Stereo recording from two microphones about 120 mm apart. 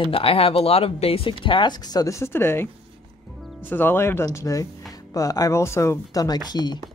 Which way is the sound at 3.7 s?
15° left (ahead or behind).